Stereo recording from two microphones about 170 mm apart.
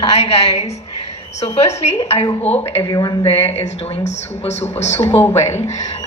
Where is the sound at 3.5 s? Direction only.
40° left (ahead or behind).